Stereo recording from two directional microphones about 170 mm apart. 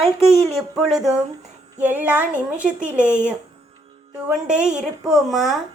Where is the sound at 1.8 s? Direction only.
10° right (ahead or behind).